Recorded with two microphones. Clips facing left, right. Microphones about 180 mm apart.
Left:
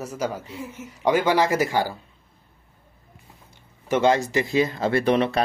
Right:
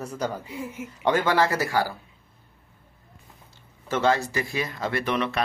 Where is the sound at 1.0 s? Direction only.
10° left (ahead or behind).